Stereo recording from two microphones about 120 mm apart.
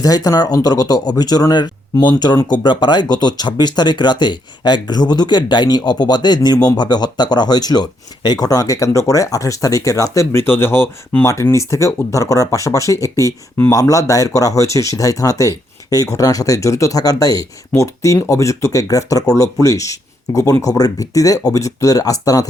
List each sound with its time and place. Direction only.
0.0 s speech: 30° left (ahead or behind)